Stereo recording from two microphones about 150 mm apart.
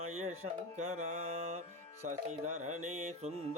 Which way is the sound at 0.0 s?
45° right (ahead or behind).